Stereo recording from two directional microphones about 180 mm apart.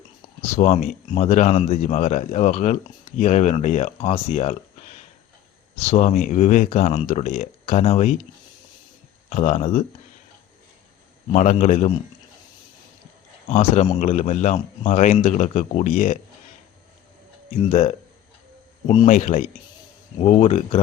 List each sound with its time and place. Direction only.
0.5 s speech: 35° left (ahead or behind)
9.3 s speech: 40° left (ahead or behind)
11.3 s speech: 40° left (ahead or behind)
13.5 s speech: 35° left (ahead or behind)
17.7 s speech: 35° left (ahead or behind)
19.0 s speech: 40° left (ahead or behind)